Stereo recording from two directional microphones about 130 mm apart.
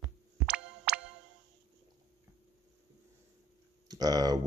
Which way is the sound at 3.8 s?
30° right (ahead or behind).